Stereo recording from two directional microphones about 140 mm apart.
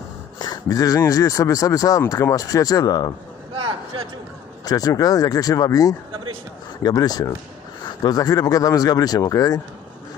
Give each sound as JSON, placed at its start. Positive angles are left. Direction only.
{"t": 0.4, "sound": "speech", "side_deg": 25}
{"t": 3.5, "sound": "a sound", "side_deg": -35}
{"t": 4.6, "sound": "speech", "side_deg": 25}